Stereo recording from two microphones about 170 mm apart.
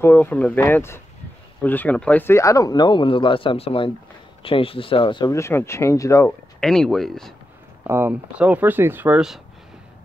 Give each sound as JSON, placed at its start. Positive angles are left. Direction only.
{"t": 0.0, "sound": "speech", "side_deg": 10}
{"t": 5.3, "sound": "speech", "side_deg": 15}
{"t": 6.6, "sound": "speech", "side_deg": 5}
{"t": 7.8, "sound": "speech", "side_deg": -15}